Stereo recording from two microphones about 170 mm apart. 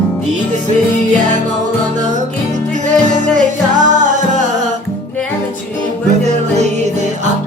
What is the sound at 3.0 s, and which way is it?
Music, 45° right (ahead or behind).